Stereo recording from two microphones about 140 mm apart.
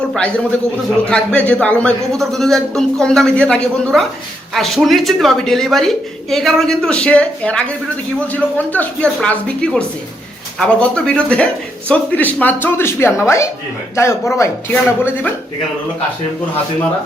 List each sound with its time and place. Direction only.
1.1 s a man's voice: 10° left (ahead or behind)